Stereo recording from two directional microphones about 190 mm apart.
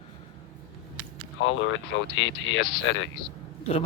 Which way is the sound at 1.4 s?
90° left.